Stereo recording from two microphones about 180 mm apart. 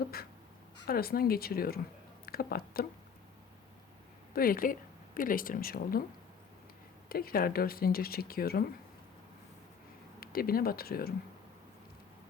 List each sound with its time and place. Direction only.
0.9 s speech: 55° left (ahead or behind)
4.4 s speech: 50° left (ahead or behind)
7.1 s speech: 55° left (ahead or behind)
10.2 s speech: 55° left (ahead or behind)